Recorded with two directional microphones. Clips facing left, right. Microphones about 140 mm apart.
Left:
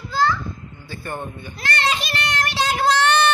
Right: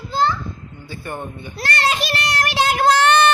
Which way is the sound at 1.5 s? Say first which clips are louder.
Right 2 dB; 40° right (ahead or behind).